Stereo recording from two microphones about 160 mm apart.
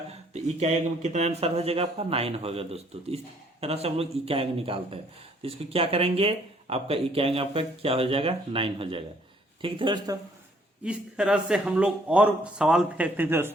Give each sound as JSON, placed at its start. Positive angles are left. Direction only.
{"t": 0.3, "sound": "speech", "side_deg": -45}
{"t": 10.8, "sound": "speech", "side_deg": -5}